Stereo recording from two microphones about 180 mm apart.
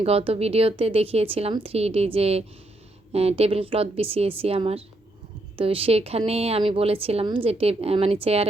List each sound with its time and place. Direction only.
0.0 s a woman's voice: 35° right (ahead or behind)